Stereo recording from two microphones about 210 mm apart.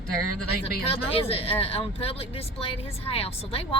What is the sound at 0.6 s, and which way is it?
Speech, 25° left (ahead or behind).